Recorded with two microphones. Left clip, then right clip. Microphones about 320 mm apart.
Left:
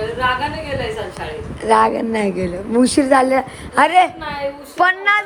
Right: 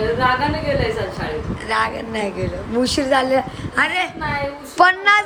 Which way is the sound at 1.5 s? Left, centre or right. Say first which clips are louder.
Left 8 dB; centre.